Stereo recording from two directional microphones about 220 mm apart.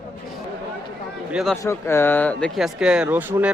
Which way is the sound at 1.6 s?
10° left (ahead or behind).